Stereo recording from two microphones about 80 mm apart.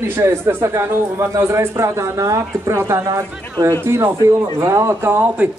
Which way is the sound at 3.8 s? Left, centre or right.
Right.